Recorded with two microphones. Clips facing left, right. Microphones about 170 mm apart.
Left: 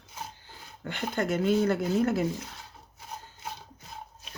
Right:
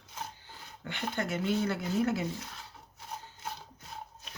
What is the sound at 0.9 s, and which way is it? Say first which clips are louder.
Speech: left 5 dB; 45° left (ahead or behind).